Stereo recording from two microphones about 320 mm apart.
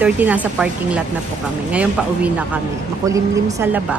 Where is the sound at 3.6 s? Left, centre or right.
Centre.